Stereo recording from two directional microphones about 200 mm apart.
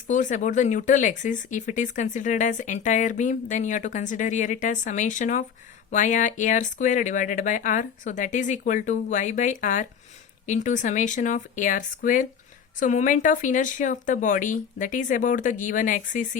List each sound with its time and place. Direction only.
0.1 s speech: 40° left (ahead or behind)